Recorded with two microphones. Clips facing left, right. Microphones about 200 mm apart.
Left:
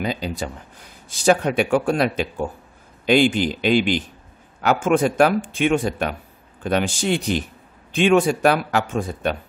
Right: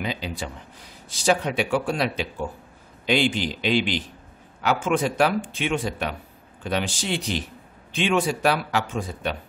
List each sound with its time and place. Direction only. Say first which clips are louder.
0.0 s speech: left 4 dB; 45° left (ahead or behind)